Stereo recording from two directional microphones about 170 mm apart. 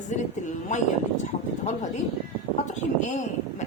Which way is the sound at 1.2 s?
45° left (ahead or behind).